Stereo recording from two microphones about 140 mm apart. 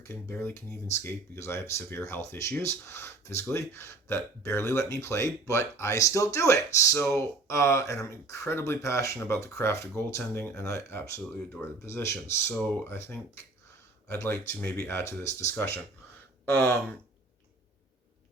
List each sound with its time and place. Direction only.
0.0 s speech: 20° left (ahead or behind)